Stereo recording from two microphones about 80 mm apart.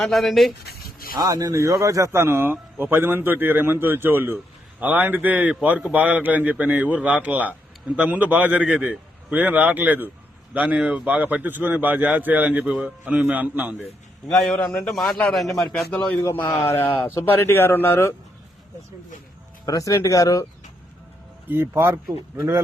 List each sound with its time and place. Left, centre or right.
0.0 s a man's voice: centre
1.1 s speech: right; by 13.8 s centre
14.3 s a man's voice: centre
16.1 s a man's voice: left
19.6 s speech: left
21.5 s speech: right